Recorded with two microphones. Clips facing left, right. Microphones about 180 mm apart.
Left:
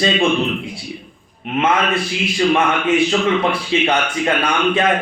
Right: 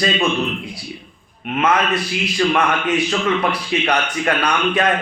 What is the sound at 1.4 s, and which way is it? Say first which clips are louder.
A man's voice: left 1 dB; 25° left (ahead or behind).